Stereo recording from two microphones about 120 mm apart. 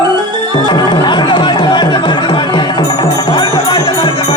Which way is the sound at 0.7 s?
40° left (ahead or behind).